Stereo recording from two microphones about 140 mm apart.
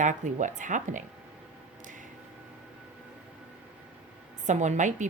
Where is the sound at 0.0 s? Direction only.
65° right (ahead or behind).